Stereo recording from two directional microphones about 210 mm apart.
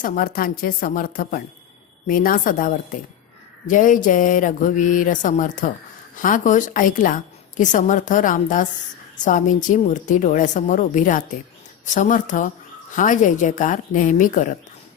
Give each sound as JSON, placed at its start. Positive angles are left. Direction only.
{"t": 0.0, "sound": "a woman's voice", "side_deg": 40}